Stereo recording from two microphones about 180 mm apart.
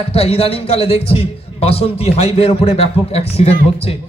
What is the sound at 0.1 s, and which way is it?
A man's voice, 35° left (ahead or behind).